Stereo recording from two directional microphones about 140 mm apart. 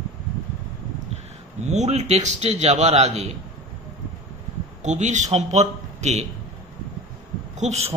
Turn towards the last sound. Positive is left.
turn(degrees=-50)  # may be behind; listen again after turning